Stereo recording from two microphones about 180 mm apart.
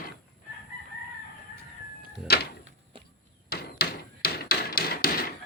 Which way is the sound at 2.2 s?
60° left (ahead or behind).